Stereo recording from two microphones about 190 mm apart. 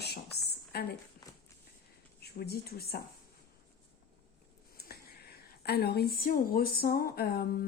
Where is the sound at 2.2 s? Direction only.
55° left (ahead or behind).